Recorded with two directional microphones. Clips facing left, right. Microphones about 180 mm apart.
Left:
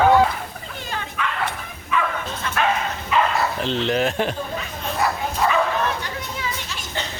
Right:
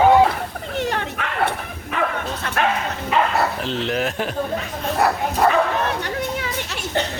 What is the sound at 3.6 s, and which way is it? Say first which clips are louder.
Speech: left 2 dB; 5° right (ahead or behind).